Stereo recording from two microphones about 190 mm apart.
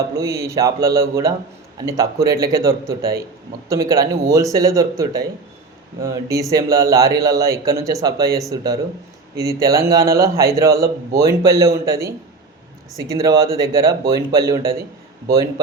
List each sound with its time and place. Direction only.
0.2 s a man's voice: 15° right (ahead or behind)